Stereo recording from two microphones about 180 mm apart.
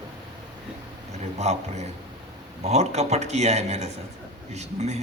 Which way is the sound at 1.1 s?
40° right (ahead or behind).